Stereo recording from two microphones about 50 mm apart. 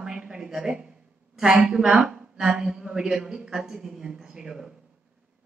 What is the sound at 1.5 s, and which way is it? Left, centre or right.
A woman's voice, centre.